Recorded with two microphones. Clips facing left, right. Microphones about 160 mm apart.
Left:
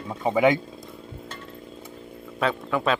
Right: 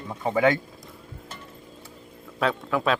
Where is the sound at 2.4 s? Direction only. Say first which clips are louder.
Even; centre (ahead or behind).